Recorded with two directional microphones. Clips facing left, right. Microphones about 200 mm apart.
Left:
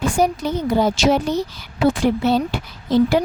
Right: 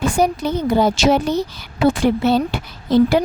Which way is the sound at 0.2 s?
65° right (ahead or behind).